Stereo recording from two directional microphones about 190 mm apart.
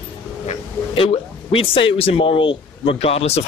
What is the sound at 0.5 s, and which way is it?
Speech, 30° left (ahead or behind).